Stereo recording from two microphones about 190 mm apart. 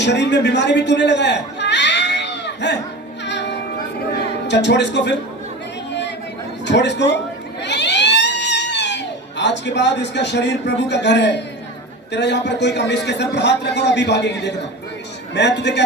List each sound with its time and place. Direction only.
0.0 s a man's voice: 65° left (ahead or behind)
3.2 s music: 65° left (ahead or behind)
4.3 s speech: 65° left (ahead or behind)
6.7 s a man's voice: 65° left (ahead or behind)
7.6 s a sound: 65° left (ahead or behind)
12.1 s a man's voice: 65° left (ahead or behind)